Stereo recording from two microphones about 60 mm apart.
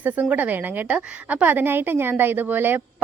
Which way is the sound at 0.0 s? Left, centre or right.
Right.